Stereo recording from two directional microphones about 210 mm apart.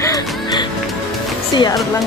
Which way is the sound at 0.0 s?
15° left (ahead or behind).